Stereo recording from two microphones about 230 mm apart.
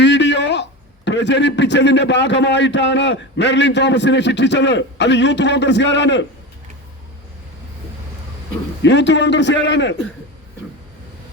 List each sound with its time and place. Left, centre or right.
0.0 s a man's voice: left
8.8 s a man's voice: left